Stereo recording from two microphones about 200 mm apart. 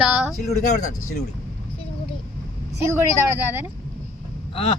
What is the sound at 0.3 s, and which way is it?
Speech, 40° left (ahead or behind).